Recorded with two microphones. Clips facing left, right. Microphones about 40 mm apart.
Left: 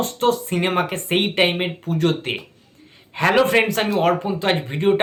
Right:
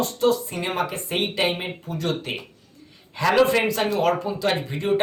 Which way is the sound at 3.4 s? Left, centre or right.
Left.